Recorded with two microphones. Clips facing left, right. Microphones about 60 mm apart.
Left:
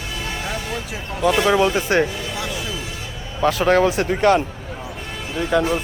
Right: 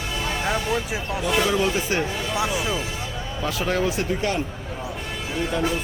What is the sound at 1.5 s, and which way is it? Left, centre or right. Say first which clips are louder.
Speech: left 5 dB; left.